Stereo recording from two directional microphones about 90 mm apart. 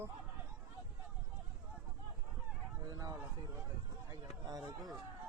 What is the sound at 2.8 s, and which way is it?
Speech, 45° right (ahead or behind).